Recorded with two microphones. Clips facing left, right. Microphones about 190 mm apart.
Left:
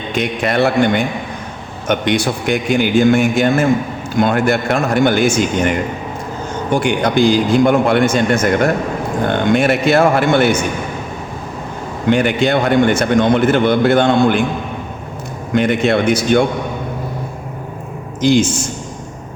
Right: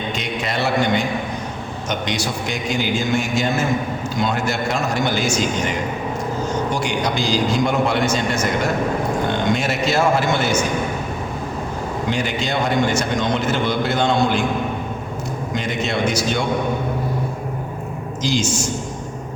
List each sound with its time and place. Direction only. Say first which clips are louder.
0.1 s a man's voice: left 12 dB; 55° left (ahead or behind)
12.0 s a man's voice: left 11 dB; 60° left (ahead or behind)
15.5 s a man's voice: left 10 dB; 60° left (ahead or behind)
18.2 s a man's voice: left 9 dB; 55° left (ahead or behind)